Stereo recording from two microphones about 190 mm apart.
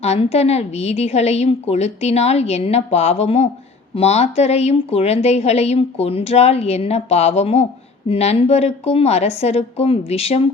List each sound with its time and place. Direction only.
0.0 s a woman's voice: 35° left (ahead or behind)